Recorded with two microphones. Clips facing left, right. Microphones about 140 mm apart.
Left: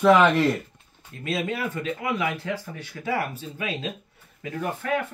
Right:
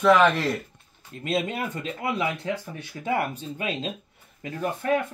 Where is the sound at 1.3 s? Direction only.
25° right (ahead or behind).